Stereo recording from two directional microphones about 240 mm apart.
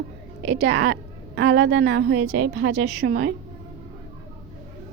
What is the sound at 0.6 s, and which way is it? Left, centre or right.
A woman's voice, right.